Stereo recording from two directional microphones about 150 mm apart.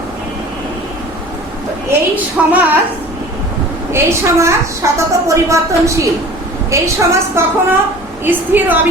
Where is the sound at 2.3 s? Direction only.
10° right (ahead or behind).